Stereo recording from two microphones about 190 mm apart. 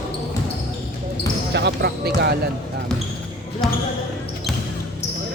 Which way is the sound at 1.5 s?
60° right (ahead or behind).